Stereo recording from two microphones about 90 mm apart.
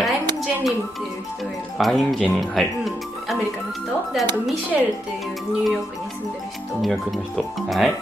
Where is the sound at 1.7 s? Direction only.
Centre (ahead or behind).